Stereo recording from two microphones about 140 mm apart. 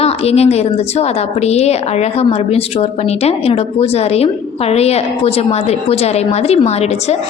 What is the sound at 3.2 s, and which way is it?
A woman's voice, 45° left (ahead or behind).